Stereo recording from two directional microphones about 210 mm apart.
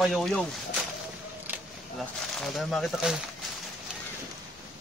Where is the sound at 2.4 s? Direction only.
Centre (ahead or behind).